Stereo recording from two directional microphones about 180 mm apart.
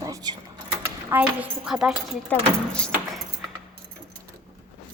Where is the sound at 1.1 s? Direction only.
5° right (ahead or behind).